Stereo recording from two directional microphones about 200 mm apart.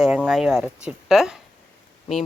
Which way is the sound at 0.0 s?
5° right (ahead or behind).